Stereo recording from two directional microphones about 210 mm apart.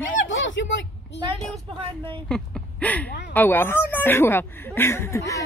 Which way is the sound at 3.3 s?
10° left (ahead or behind).